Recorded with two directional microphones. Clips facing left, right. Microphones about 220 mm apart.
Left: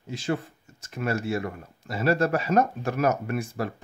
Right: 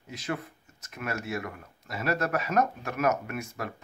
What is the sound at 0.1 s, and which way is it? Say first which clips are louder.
Speech: left 5 dB; 30° left (ahead or behind).